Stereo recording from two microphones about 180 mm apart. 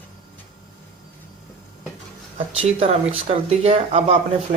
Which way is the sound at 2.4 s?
35° right (ahead or behind).